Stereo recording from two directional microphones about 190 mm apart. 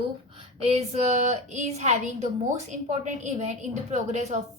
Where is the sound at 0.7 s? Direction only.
35° right (ahead or behind).